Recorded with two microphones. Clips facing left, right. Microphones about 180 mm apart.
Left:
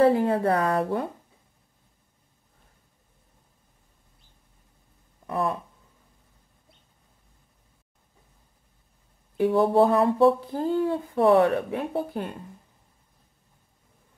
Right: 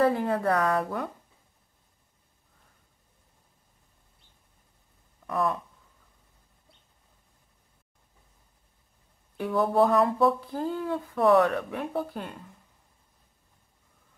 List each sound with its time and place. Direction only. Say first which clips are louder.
0.0 s speech: left 4 dB; 25° left (ahead or behind)
5.2 s speech: left 1 dB; 30° left (ahead or behind)
9.4 s speech: left 4 dB; 30° left (ahead or behind)